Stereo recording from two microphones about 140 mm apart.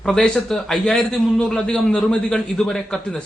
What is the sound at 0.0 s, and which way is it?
A man's voice, 5° left (ahead or behind).